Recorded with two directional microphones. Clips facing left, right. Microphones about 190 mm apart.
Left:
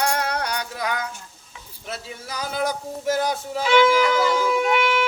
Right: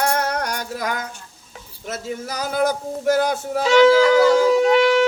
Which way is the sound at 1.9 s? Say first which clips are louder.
Right 6 dB; 45° right (ahead or behind).